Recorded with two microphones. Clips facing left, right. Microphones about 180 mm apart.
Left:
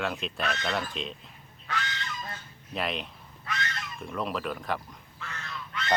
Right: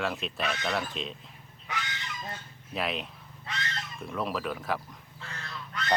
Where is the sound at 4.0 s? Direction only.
Centre (ahead or behind).